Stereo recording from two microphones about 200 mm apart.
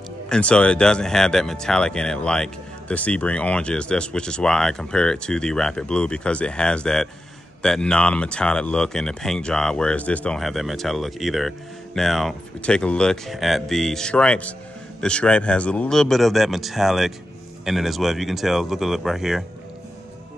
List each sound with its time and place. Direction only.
0.3 s speech: 5° left (ahead or behind)